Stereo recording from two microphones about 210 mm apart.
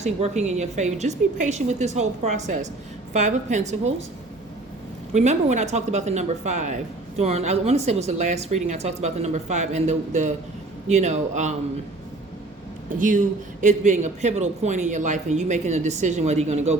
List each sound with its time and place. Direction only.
0.0 s speech: 30° right (ahead or behind)
5.1 s speech: 35° right (ahead or behind)
12.9 s speech: 35° right (ahead or behind)